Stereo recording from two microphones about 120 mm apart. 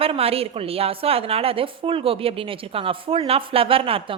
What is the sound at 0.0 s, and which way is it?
A woman's voice, 55° right (ahead or behind).